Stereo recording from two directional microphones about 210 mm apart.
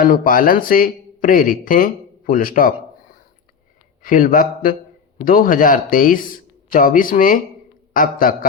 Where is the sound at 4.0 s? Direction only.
40° left (ahead or behind).